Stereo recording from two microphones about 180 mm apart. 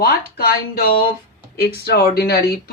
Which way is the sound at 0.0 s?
60° left (ahead or behind).